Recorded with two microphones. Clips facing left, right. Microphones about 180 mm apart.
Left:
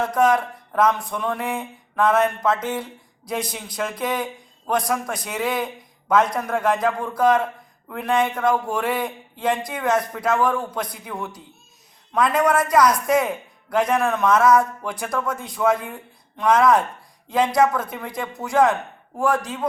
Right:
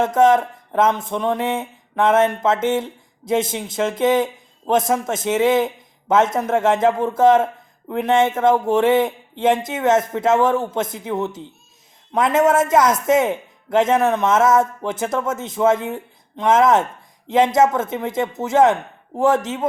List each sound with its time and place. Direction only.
0.0 s speech: 25° right (ahead or behind)